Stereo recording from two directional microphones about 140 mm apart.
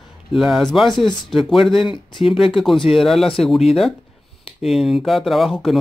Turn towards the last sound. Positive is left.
turn(degrees=0)  # may be behind; listen again after turning